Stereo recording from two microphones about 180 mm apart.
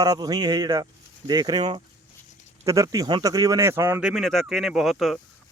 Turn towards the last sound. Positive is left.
turn(degrees=0)  # may be behind; listen again after turning